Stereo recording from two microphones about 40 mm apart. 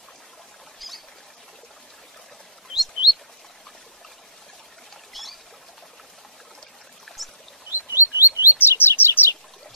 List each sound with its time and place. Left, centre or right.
0.7 s a sound: centre
2.7 s chirp: centre
5.1 s rodents: centre
7.1 s pour: centre
7.9 s chirp: right
8.5 s chirp: left